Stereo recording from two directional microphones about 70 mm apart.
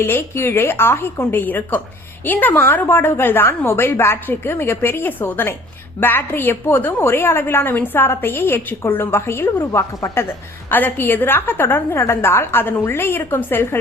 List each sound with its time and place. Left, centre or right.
0.0 s a woman's voice: left